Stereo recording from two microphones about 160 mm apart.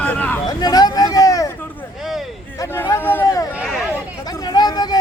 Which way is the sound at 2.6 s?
20° left (ahead or behind).